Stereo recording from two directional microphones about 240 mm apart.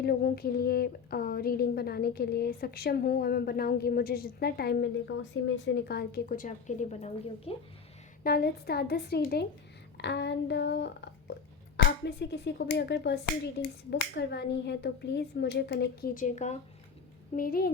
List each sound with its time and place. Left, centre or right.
0.0 s a woman's voice: left
8.2 s a woman's voice: left